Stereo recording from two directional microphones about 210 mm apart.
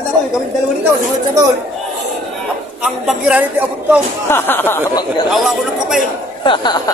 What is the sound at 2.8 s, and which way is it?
A woman's voice, 5° right (ahead or behind).